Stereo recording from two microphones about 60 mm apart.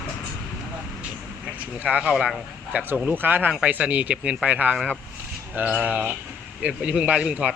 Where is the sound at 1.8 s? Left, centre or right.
Right.